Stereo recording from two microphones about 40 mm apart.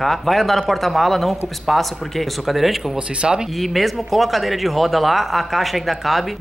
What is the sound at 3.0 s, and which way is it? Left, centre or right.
Speech, right.